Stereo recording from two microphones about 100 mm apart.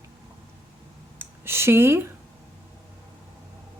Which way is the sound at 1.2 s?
25° right (ahead or behind).